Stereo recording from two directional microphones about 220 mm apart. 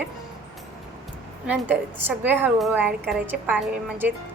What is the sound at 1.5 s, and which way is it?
A woman's voice, 5° right (ahead or behind).